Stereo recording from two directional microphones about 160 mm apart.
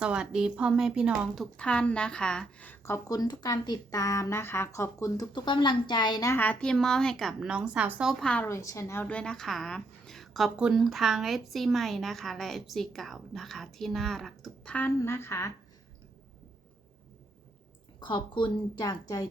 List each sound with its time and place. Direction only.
0.0 s speech: 5° right (ahead or behind)
1.5 s a woman's voice: 5° left (ahead or behind)
8.2 s a woman's voice: 5° left (ahead or behind)
8.4 s speech: 20° left (ahead or behind)
18.0 s a woman's voice: 30° left (ahead or behind)